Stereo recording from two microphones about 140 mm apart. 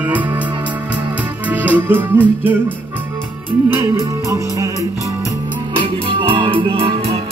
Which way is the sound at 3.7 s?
20° right (ahead or behind).